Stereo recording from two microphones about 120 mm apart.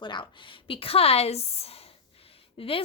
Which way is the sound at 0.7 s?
50° left (ahead or behind).